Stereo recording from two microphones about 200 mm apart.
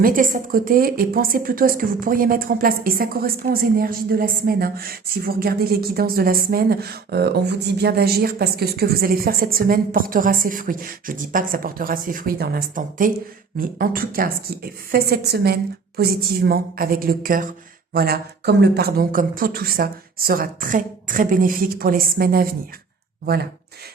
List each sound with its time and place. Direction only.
0.0 s a woman's voice: 45° right (ahead or behind)